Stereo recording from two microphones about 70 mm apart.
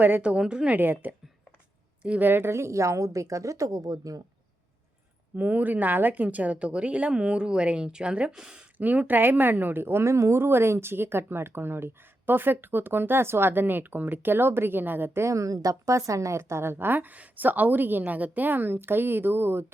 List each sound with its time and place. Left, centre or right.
0.2 s speech: centre
0.8 s a woman's voice: right
5.4 s speech: right
8.8 s a woman's voice: right